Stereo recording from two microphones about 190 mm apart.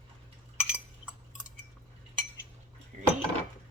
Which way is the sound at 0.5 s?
5° right (ahead or behind).